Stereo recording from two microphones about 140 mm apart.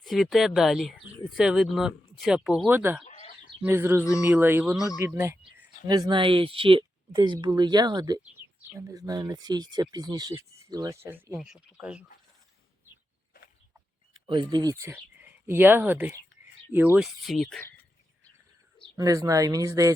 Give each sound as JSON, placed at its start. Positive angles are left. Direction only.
{"t": 0.0, "sound": "speech", "side_deg": 0}
{"t": 3.1, "sound": "chicken", "side_deg": 50}
{"t": 3.6, "sound": "speech", "side_deg": -15}
{"t": 5.9, "sound": "speech", "side_deg": -30}
{"t": 11.3, "sound": "speech", "side_deg": -5}
{"t": 14.3, "sound": "speech", "side_deg": -30}
{"t": 14.8, "sound": "speech", "side_deg": -15}
{"t": 17.0, "sound": "speech", "side_deg": 0}
{"t": 18.9, "sound": "speech", "side_deg": -25}